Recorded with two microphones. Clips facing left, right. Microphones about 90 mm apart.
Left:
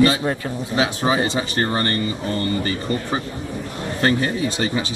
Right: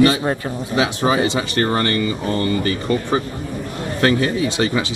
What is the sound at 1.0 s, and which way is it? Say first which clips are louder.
Speech: right 2 dB; 70° right (ahead or behind).